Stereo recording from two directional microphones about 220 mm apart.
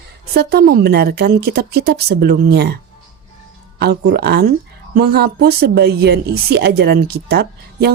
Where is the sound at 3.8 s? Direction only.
45° right (ahead or behind).